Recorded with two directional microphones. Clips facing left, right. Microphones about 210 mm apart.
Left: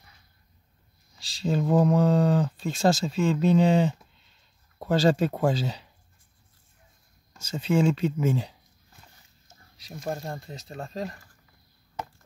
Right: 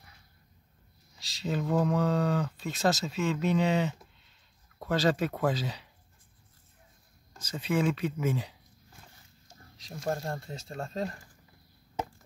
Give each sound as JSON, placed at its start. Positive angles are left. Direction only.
{"t": 1.2, "sound": "speech", "side_deg": 30}
{"t": 7.3, "sound": "speech", "side_deg": 25}
{"t": 9.8, "sound": "speech", "side_deg": 5}